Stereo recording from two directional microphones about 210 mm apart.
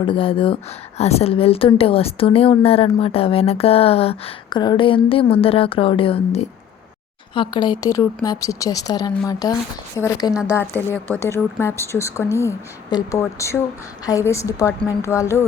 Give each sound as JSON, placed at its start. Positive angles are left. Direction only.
{"t": 0.0, "sound": "a woman's voice", "side_deg": 25}